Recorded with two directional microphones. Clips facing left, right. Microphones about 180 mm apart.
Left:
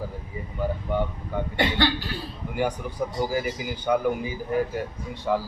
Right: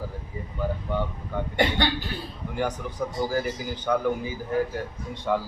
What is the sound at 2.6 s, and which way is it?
A man's voice, 10° left (ahead or behind).